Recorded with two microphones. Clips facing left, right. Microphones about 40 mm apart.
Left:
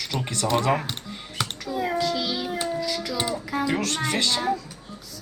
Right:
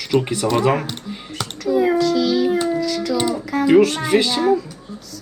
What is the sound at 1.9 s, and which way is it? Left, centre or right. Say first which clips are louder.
Child singing: right 9 dB; centre.